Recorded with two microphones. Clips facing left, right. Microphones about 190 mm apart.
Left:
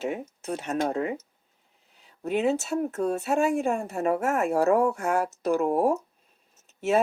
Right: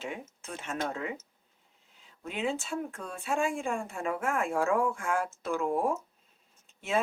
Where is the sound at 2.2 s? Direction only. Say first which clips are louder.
Left 8 dB; 40° left (ahead or behind).